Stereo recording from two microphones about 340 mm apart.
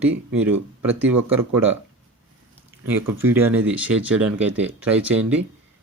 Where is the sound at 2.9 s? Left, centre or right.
Centre.